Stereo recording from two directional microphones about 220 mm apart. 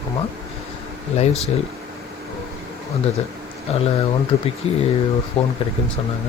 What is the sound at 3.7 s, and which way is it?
Speech, 30° left (ahead or behind).